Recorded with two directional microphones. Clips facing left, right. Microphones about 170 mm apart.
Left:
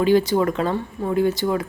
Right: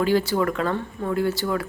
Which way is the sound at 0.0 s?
20° left (ahead or behind).